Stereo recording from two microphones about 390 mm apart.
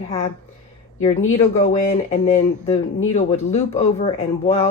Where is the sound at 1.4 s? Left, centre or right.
Centre.